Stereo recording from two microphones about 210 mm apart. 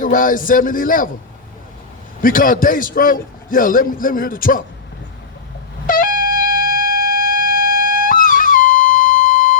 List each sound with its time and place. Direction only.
0.0 s a man's voice: 40° left (ahead or behind)
2.2 s a man's voice: 40° left (ahead or behind)
5.8 s shofar: 40° left (ahead or behind)